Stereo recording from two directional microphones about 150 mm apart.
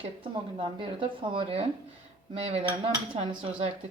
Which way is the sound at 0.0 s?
35° right (ahead or behind).